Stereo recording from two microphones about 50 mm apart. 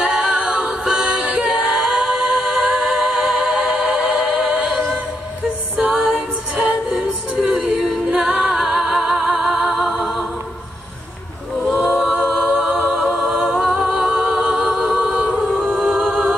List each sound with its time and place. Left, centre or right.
0.0 s music: right
5.8 s music: right
7.5 s a capella: centre
8.6 s music: centre
12.0 s a capella: centre
12.4 s a capella: right
15.7 s music: centre